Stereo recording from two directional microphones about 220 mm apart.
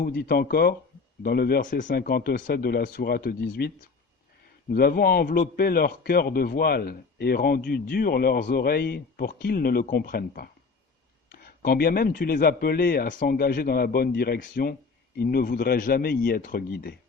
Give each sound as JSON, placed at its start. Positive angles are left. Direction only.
{"t": 0.0, "sound": "a man's voice", "side_deg": 45}
{"t": 4.7, "sound": "a man's voice", "side_deg": 45}